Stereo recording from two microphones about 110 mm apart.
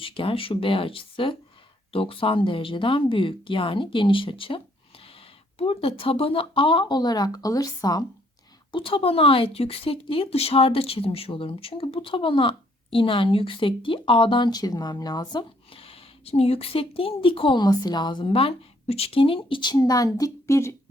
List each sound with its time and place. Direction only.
0.0 s speech: 55° left (ahead or behind)
5.5 s speech: 60° left (ahead or behind); by 8.0 s 35° left (ahead or behind)
8.7 s speech: 55° left (ahead or behind)
15.7 s a woman's voice: 60° left (ahead or behind); by 20.7 s 25° left (ahead or behind)